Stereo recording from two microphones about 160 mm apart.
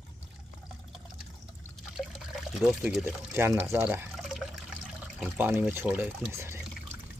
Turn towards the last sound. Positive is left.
turn(degrees=-15)  # may be behind; listen again after turning